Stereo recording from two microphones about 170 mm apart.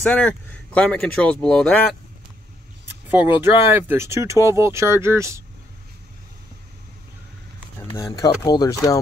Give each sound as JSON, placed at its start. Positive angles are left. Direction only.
{"t": 0.0, "sound": "speech", "side_deg": 5}
{"t": 2.9, "sound": "a sound", "side_deg": -10}
{"t": 3.7, "sound": "speech", "side_deg": -15}
{"t": 8.0, "sound": "speech", "side_deg": 20}